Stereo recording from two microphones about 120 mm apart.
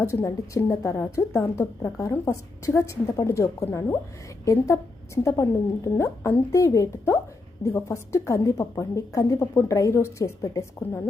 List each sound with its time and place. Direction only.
0.0 s a woman's voice: 25° left (ahead or behind)